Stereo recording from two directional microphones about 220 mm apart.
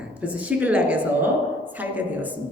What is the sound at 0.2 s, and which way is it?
A woman's voice, 5° right (ahead or behind).